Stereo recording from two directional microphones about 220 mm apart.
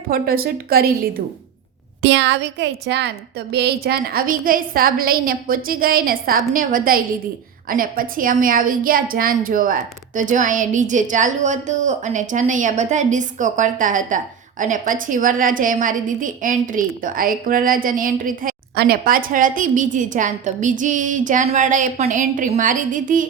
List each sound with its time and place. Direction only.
0.1 s a woman's voice: 45° right (ahead or behind)
2.0 s a woman's voice: 55° right (ahead or behind); by 23.2 s 35° right (ahead or behind)